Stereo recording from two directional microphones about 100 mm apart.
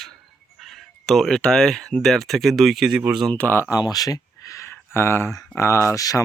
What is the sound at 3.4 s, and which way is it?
Speech, 20° left (ahead or behind).